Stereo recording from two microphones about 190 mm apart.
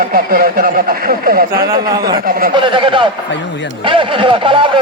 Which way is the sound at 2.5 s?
25° right (ahead or behind).